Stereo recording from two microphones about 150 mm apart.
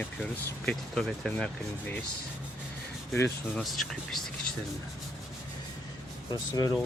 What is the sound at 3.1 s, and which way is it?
Speech, 15° left (ahead or behind).